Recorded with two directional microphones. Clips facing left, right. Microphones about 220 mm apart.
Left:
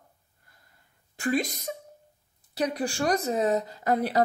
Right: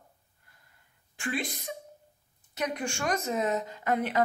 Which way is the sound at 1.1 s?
40° left (ahead or behind).